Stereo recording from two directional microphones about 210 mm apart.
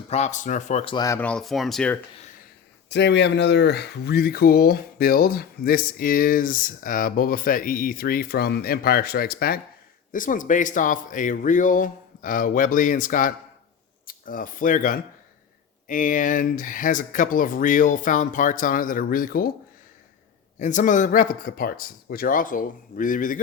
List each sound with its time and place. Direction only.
0.1 s speech: 35° left (ahead or behind)
0.9 s speech: 15° left (ahead or behind)
2.9 s speech: 55° left (ahead or behind)
20.6 s speech: 35° left (ahead or behind)